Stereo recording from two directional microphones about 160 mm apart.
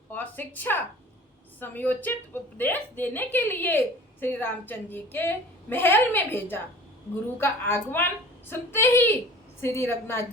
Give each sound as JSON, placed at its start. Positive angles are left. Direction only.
{"t": 0.1, "sound": "a woman's voice", "side_deg": 10}